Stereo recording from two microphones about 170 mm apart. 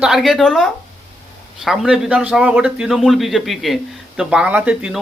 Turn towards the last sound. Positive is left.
turn(degrees=-5)  # may be behind; listen again after turning